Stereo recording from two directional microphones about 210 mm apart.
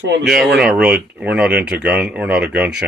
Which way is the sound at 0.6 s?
5° right (ahead or behind).